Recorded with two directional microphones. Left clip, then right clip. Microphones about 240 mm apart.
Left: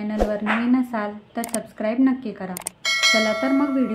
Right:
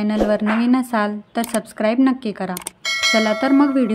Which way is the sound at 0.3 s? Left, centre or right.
Right.